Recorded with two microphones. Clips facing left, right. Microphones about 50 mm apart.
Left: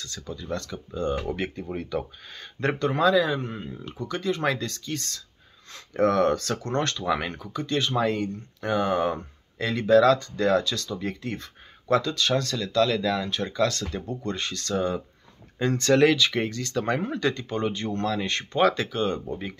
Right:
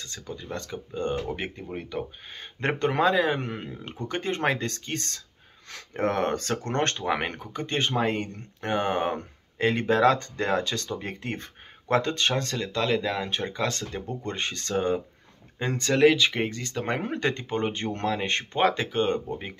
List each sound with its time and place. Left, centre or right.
0.1 s speech: right
1.3 s speech: centre
2.7 s speech: right
3.3 s speech: right
5.9 s speech: right
10.1 s speech: right
10.4 s speech: right
15.6 s speech: centre
16.2 s speech: right
17.0 s speech: right